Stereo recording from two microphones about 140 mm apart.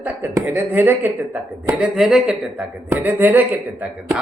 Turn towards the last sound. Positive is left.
turn(degrees=-10)  # may be behind; listen again after turning